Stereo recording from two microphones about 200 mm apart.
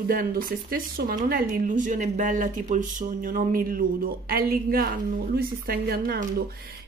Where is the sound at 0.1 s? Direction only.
45° right (ahead or behind).